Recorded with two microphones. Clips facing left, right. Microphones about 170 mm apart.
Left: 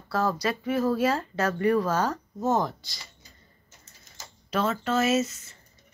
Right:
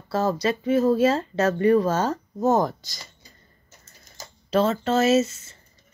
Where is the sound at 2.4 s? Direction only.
40° right (ahead or behind).